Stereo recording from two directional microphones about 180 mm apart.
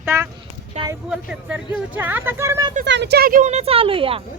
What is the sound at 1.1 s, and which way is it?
Speech, 5° right (ahead or behind).